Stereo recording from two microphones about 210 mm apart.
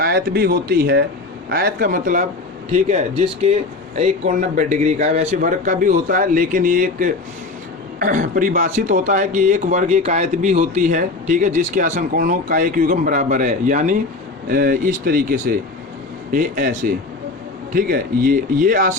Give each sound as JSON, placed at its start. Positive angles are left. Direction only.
{"t": 0.0, "sound": "speech", "side_deg": -45}
{"t": 2.7, "sound": "speech", "side_deg": -30}